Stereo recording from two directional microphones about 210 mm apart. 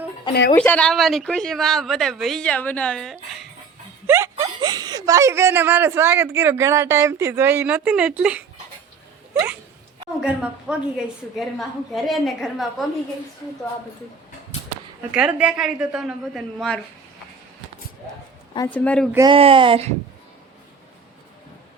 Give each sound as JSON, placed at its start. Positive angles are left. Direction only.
{"t": 0.5, "sound": "speech", "side_deg": 5}
{"t": 4.0, "sound": "speech", "side_deg": -10}
{"t": 10.2, "sound": "speech", "side_deg": -5}
{"t": 15.1, "sound": "speech", "side_deg": -5}
{"t": 18.7, "sound": "speech", "side_deg": 5}
{"t": 19.1, "sound": "speech", "side_deg": -20}